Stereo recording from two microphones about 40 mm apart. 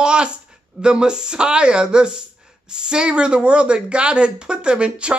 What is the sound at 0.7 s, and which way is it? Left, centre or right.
Speech, right.